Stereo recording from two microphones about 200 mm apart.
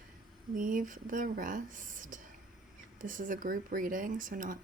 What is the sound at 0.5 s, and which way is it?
Speech, 45° right (ahead or behind).